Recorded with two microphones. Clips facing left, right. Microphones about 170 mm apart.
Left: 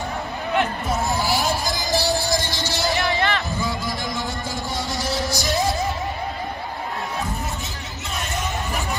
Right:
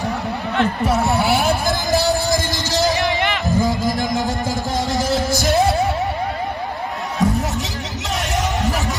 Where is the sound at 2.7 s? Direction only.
40° right (ahead or behind).